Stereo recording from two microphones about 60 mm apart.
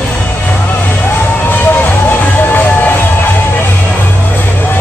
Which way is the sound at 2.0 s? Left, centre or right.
Left.